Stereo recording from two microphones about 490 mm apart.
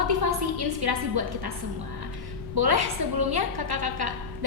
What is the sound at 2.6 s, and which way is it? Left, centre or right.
A woman's voice, right.